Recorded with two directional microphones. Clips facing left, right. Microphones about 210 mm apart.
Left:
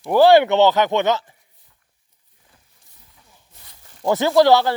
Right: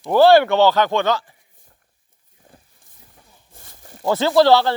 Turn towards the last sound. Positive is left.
turn(degrees=15)  # may be behind; listen again after turning